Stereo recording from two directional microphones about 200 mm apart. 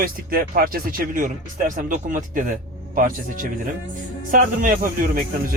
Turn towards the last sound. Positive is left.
turn(degrees=-45)  # may be behind; listen again after turning